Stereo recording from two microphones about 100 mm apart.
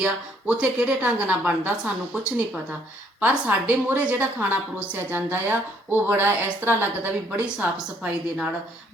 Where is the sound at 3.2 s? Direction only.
15° right (ahead or behind).